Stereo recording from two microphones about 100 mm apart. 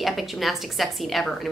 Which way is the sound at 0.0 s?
Centre (ahead or behind).